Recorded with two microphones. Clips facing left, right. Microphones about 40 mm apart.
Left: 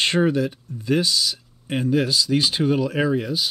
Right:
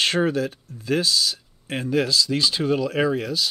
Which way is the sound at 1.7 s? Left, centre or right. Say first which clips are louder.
Left 2 dB; centre.